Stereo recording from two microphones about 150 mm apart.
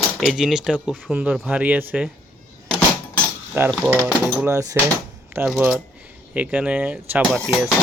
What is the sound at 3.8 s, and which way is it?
Speech, 10° right (ahead or behind).